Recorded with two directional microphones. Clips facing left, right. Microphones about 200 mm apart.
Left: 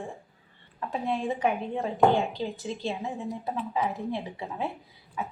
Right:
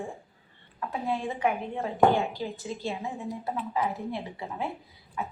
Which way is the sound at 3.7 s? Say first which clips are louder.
Left 1 dB; 15° left (ahead or behind).